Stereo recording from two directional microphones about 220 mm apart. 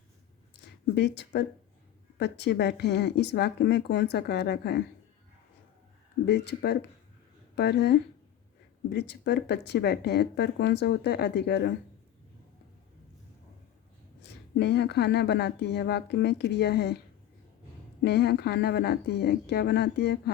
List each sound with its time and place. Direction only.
0.9 s speech: 50° left (ahead or behind)
6.2 s speech: 50° left (ahead or behind)
14.2 s speech: 50° left (ahead or behind)
18.0 s speech: 50° left (ahead or behind)